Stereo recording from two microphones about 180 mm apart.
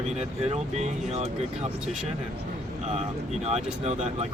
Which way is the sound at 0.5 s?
35° right (ahead or behind).